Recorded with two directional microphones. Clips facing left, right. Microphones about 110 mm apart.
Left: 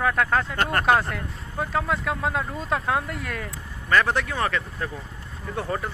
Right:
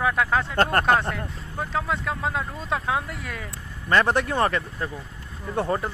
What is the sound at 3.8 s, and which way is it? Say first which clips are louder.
Speech: right 1 dB; 25° right (ahead or behind).